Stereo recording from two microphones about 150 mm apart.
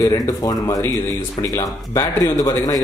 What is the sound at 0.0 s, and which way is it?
A man's voice, 25° left (ahead or behind).